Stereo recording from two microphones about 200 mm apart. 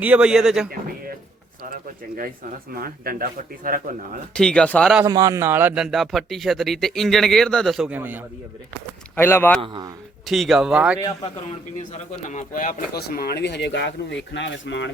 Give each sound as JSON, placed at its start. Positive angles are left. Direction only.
{"t": 0.0, "sound": "a man's voice", "side_deg": -5}
{"t": 1.7, "sound": "speech", "side_deg": -45}
{"t": 4.4, "sound": "a man's voice", "side_deg": 5}
{"t": 5.0, "sound": "a man's voice", "side_deg": -20}
{"t": 9.1, "sound": "a man's voice", "side_deg": 10}
{"t": 12.3, "sound": "speech", "side_deg": 40}
{"t": 13.0, "sound": "speech", "side_deg": 55}